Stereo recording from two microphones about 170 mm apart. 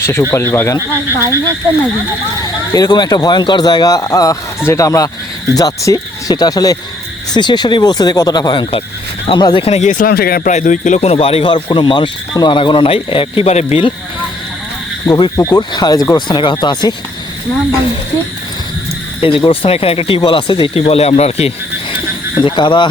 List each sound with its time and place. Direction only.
0.0 s speech: 15° left (ahead or behind)
0.8 s speech: 15° right (ahead or behind)
2.7 s speech: 25° left (ahead or behind); by 10.1 s 45° left (ahead or behind)
10.1 s speech: 65° left (ahead or behind)
10.5 s speech: 45° left (ahead or behind)
15.0 s speech: 20° left (ahead or behind)
19.5 s speech: 35° left (ahead or behind)